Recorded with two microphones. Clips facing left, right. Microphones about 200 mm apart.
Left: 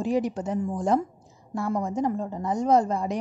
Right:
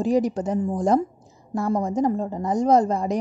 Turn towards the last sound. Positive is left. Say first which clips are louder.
# right 3 dB
turn(degrees=-40)  # may be behind; listen again after turning